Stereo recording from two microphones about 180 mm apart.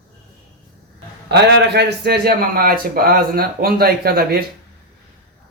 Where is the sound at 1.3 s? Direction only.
65° right (ahead or behind).